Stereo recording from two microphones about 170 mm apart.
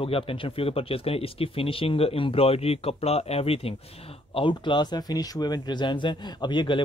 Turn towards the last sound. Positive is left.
turn(degrees=25)  # may be behind; listen again after turning